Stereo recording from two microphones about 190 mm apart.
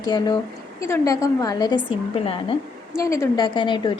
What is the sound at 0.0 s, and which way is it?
Speech, 20° left (ahead or behind).